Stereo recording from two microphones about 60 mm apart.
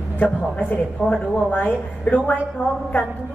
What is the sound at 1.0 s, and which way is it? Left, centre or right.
Speech, right.